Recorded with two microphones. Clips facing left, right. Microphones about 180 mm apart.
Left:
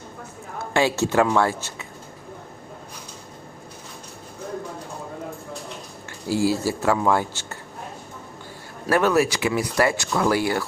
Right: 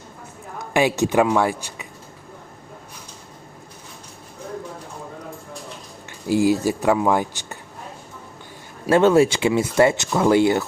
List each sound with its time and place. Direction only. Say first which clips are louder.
0.6 s speech: right 2 dB; 15° right (ahead or behind)
6.2 s speech: right 4 dB; 20° right (ahead or behind)
8.9 s speech: right 5 dB; 25° right (ahead or behind)